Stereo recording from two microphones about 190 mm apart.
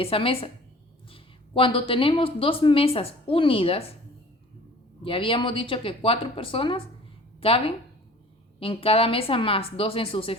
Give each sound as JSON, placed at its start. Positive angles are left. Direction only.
{"t": 0.0, "sound": "speech", "side_deg": 30}
{"t": 5.0, "sound": "speech", "side_deg": 30}